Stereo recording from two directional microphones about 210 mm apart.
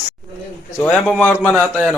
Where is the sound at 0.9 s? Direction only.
5° left (ahead or behind).